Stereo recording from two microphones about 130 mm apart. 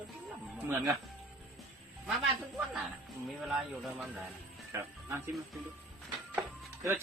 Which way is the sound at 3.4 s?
5° right (ahead or behind).